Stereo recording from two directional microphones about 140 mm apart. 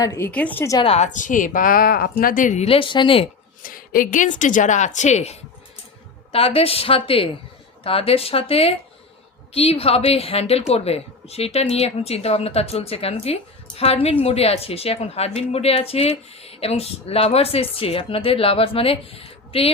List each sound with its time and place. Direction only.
0.0 s a woman's voice: 20° left (ahead or behind)
0.3 s a woman's voice: 10° left (ahead or behind)
0.9 s speech: 55° left (ahead or behind)
2.6 s speech: 40° left (ahead or behind)
3.6 s a woman's voice: 85° left; by 19.7 s 45° left (ahead or behind)